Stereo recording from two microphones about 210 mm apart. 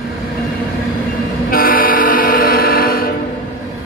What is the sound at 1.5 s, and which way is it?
Train, 45° left (ahead or behind).